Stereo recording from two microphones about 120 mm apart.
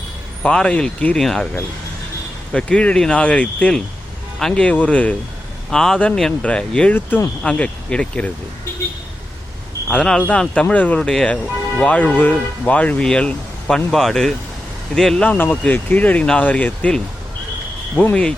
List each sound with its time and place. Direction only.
0.4 s speech: 10° left (ahead or behind)
2.5 s speech: 5° left (ahead or behind)
9.9 s speech: 5° left (ahead or behind)